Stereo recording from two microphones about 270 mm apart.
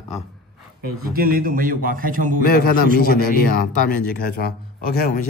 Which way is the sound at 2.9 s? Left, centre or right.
Left.